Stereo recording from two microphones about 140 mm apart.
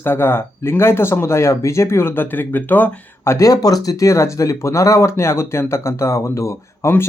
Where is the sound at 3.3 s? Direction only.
25° left (ahead or behind).